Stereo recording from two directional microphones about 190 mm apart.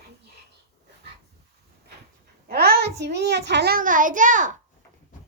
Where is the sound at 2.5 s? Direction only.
55° right (ahead or behind).